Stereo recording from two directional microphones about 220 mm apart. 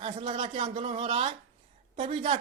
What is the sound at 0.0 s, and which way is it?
Speech, 25° right (ahead or behind).